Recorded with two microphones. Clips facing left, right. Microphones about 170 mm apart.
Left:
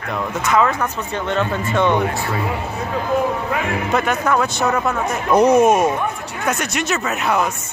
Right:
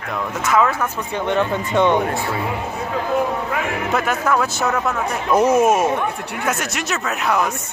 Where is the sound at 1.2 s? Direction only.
15° right (ahead or behind).